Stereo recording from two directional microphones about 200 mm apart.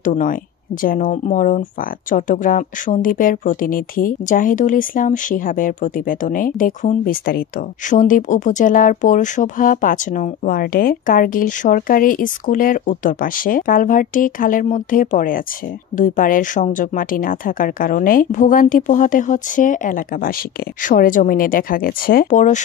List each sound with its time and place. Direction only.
0.0 s speech: 40° left (ahead or behind)